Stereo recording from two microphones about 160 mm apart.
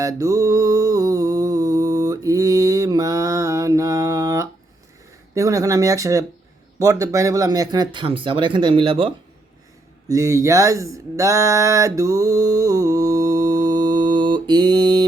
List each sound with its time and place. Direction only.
0.0 s mantra: 20° right (ahead or behind)
5.3 s speech: 20° right (ahead or behind)
10.1 s a sound: 20° right (ahead or behind)